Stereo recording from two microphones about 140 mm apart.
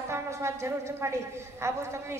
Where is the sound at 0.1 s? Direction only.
20° right (ahead or behind).